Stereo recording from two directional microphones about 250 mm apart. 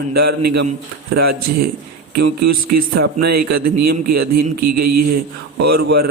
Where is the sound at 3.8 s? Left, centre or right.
Right.